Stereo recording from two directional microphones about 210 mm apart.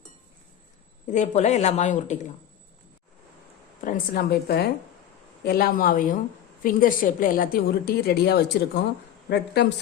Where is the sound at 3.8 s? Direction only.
40° left (ahead or behind).